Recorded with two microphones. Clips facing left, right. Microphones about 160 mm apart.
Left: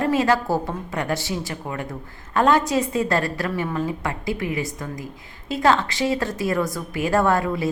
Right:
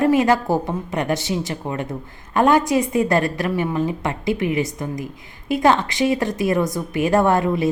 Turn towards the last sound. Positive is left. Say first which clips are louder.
# right 3 dB
turn(degrees=-20)  # may be behind; listen again after turning